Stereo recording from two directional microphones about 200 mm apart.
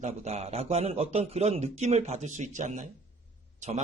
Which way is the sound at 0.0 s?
30° right (ahead or behind).